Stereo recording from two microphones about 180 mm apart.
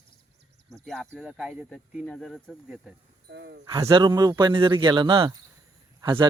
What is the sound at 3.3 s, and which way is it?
Speech, 70° right (ahead or behind).